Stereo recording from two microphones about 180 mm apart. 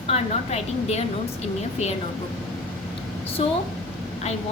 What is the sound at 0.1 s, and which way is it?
Speech, 35° left (ahead or behind).